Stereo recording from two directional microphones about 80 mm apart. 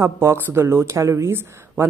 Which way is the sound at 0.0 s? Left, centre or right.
Right.